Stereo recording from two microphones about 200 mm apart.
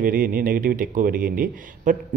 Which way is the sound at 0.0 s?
45° right (ahead or behind).